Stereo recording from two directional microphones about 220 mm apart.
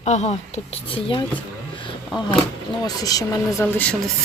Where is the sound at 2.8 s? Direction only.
15° left (ahead or behind).